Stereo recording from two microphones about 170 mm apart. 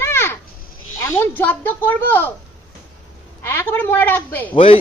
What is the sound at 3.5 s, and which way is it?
Speech, 15° left (ahead or behind).